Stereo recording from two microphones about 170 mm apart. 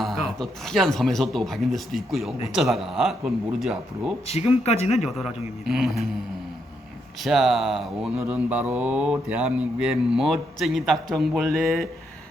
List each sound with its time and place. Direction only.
0.0 s speech: centre (ahead or behind)
4.3 s speech: 40° left (ahead or behind)
5.6 s speech: centre (ahead or behind)
7.2 s speech: centre (ahead or behind)
8.3 s mantra: 10° right (ahead or behind)
11.1 s speech: centre (ahead or behind)